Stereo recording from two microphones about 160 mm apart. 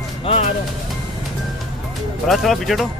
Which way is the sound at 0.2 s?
35° left (ahead or behind).